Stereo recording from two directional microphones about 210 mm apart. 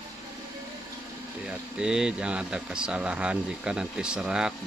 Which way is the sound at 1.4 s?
5° right (ahead or behind).